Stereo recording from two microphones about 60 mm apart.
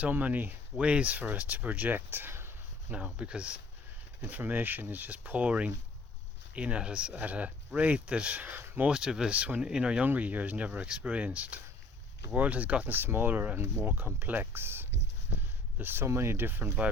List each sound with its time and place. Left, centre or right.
0.1 s speech: right
2.0 s speech: right
2.9 s speech: centre
8.9 s speech: centre
9.3 s speech: right
9.6 s speech: centre
10.1 s speech: right